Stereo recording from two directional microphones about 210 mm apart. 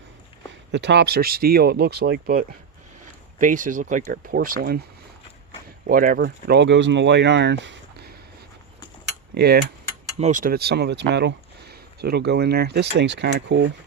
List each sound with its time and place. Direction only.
0.7 s speech: 55° right (ahead or behind)
5.9 s speech: 40° right (ahead or behind); by 8.1 s 60° right (ahead or behind)
9.3 s speech: 50° right (ahead or behind)
10.2 s speech: 35° right (ahead or behind); by 13.7 s 55° right (ahead or behind)